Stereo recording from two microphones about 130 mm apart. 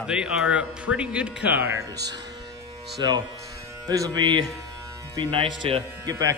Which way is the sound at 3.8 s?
25° right (ahead or behind).